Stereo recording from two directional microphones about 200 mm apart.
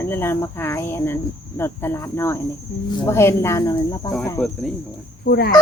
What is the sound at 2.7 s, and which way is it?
Speech, 55° left (ahead or behind).